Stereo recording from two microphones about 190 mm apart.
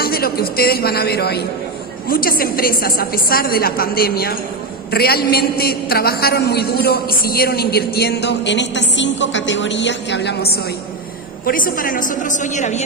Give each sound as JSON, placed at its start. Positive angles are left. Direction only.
{"t": 0.0, "sound": "a man's voice", "side_deg": 55}
{"t": 11.4, "sound": "a woman's voice", "side_deg": 45}